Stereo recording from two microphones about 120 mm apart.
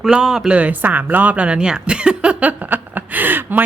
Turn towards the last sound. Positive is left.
turn(degrees=-15)  # may be behind; listen again after turning